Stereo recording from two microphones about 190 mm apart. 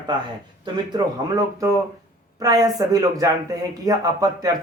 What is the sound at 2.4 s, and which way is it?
Speech, 20° right (ahead or behind).